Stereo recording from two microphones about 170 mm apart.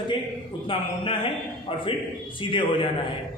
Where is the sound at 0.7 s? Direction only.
30° left (ahead or behind).